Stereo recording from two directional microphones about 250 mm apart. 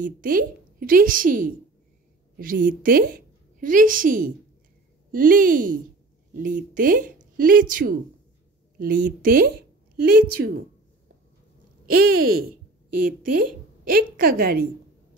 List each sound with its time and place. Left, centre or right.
0.0 s a woman's voice: right
11.8 s a sound: right
12.1 s a woman's voice: right
13.8 s a woman's voice: right